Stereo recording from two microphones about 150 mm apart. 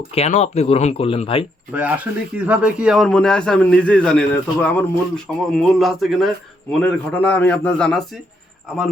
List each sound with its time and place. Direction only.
0.1 s speech: 45° left (ahead or behind)
1.7 s a man's voice: 10° right (ahead or behind)